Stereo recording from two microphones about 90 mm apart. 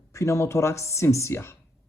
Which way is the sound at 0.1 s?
35° left (ahead or behind).